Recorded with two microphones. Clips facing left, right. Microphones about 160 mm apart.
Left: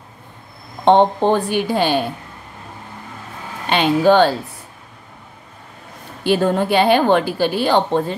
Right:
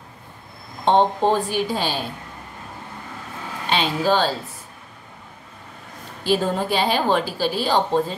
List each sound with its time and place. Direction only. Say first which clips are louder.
0.8 s a woman's voice: left 4 dB; 60° left (ahead or behind)
3.7 s a woman's voice: left 7 dB; 60° left (ahead or behind)
6.2 s a woman's voice: left 4 dB; 65° left (ahead or behind)